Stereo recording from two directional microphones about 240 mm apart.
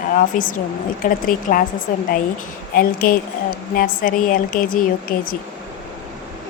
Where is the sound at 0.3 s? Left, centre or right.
Left.